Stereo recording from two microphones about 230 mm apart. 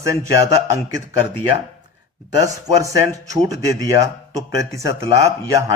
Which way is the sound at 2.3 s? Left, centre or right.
Centre.